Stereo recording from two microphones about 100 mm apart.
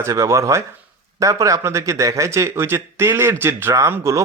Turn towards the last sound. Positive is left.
turn(degrees=-30)  # may be behind; listen again after turning